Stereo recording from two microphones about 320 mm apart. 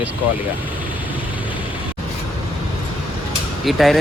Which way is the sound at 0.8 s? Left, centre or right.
Centre.